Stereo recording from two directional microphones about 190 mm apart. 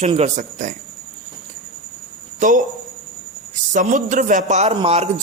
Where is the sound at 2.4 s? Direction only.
40° right (ahead or behind).